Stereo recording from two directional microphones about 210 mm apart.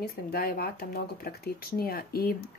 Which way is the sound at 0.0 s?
45° left (ahead or behind).